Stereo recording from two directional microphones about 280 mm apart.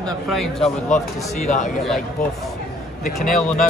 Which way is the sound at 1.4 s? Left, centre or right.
Left.